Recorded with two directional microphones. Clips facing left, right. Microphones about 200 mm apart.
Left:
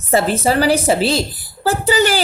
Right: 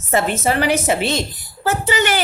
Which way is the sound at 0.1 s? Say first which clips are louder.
Left 3 dB; 35° left (ahead or behind).